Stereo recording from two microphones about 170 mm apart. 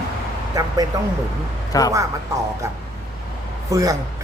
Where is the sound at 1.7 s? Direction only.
20° left (ahead or behind).